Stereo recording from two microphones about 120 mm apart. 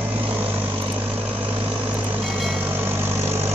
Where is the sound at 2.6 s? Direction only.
15° right (ahead or behind).